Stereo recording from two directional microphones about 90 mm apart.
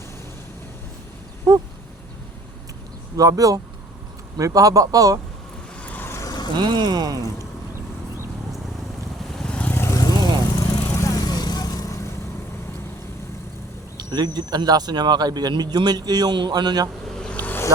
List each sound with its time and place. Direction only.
1.5 s a man's voice: 35° right (ahead or behind)
3.2 s a man's voice: 40° right (ahead or behind)
5.8 s vehicle: 20° left (ahead or behind)
6.1 s vehicle: 35° left (ahead or behind)
6.6 s speech: 55° right (ahead or behind)
9.4 s vehicle: 10° left (ahead or behind)
9.7 s vehicle: 30° left (ahead or behind)
10.0 s vehicle: 45° left (ahead or behind)
10.8 s vehicle: 35° left (ahead or behind)
13.9 s speech: 50° right (ahead or behind)
17.2 s vehicle: 15° left (ahead or behind)